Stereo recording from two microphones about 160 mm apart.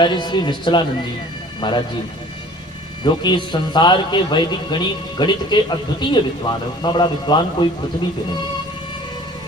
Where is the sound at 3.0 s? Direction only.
30° left (ahead or behind).